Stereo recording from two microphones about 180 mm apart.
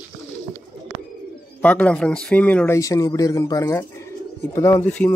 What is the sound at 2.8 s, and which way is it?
Speech, 20° left (ahead or behind).